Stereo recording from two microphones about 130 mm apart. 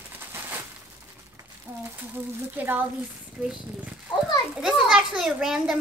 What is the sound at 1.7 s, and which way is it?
A woman's voice, 20° right (ahead or behind).